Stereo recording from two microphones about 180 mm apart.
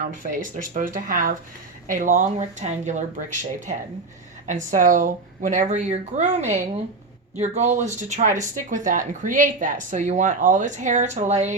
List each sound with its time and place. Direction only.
0.2 s speech: 50° right (ahead or behind)
4.4 s speech: 45° right (ahead or behind)